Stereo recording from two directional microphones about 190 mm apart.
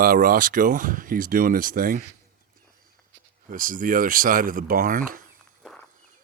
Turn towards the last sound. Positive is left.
turn(degrees=-45)  # may be behind; listen again after turning